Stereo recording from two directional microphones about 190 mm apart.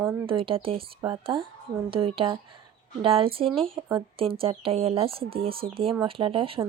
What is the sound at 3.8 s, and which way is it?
A woman's voice, 20° right (ahead or behind).